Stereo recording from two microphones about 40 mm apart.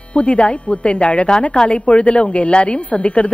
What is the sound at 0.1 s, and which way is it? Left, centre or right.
A woman's voice, left.